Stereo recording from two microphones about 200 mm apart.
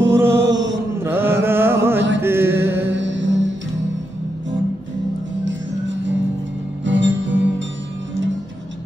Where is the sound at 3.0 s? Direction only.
65° right (ahead or behind).